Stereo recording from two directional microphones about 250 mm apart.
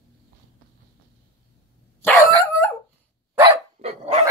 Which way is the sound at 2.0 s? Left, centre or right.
Centre.